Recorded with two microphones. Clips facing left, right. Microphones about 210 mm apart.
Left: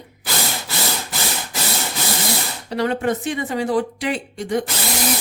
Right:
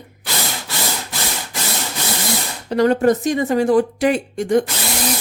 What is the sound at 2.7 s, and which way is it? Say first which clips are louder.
A woman's voice: right 6 dB; 45° right (ahead or behind).